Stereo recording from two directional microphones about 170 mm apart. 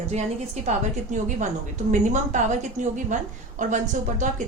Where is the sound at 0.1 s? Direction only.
40° right (ahead or behind).